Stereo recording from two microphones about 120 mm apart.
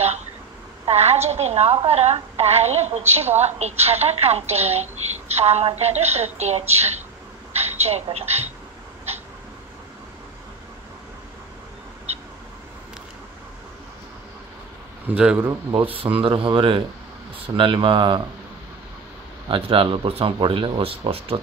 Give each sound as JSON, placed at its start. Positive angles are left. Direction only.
{"t": 0.8, "sound": "a woman's voice", "side_deg": -60}
{"t": 12.1, "sound": "vehicle", "side_deg": -60}
{"t": 15.0, "sound": "a man's voice", "side_deg": -10}
{"t": 15.7, "sound": "speech", "side_deg": -50}
{"t": 19.5, "sound": "speech", "side_deg": -45}